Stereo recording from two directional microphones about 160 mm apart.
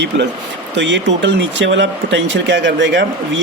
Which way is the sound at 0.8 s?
90° right.